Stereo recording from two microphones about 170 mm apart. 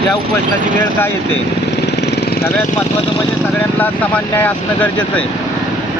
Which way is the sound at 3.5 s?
10° left (ahead or behind).